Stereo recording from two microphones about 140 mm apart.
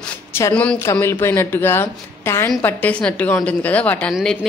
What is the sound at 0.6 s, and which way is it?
A woman's voice, 10° left (ahead or behind).